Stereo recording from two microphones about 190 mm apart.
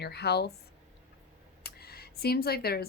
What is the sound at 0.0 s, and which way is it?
Speech, 60° left (ahead or behind).